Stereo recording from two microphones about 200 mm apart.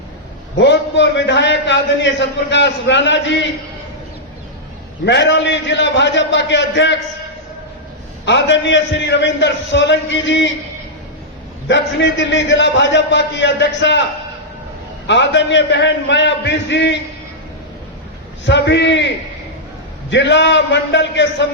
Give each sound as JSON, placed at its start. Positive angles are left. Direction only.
{"t": 0.5, "sound": "a man's voice", "side_deg": 65}
{"t": 5.0, "sound": "a man's voice", "side_deg": 60}
{"t": 8.2, "sound": "a man's voice", "side_deg": 65}
{"t": 11.7, "sound": "a man's voice", "side_deg": 65}
{"t": 15.0, "sound": "a man's voice", "side_deg": 65}
{"t": 18.4, "sound": "a man's voice", "side_deg": 60}